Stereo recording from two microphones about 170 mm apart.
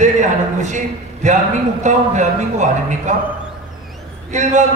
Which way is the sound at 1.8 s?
45° right (ahead or behind).